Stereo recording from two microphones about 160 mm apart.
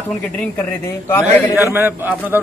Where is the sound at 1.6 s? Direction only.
15° right (ahead or behind).